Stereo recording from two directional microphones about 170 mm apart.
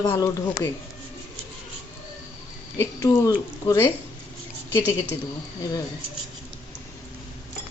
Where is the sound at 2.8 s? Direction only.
20° left (ahead or behind).